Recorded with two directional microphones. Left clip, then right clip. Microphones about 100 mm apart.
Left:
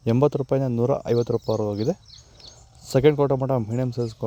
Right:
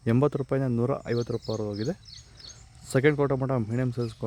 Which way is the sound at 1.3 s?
15° left (ahead or behind).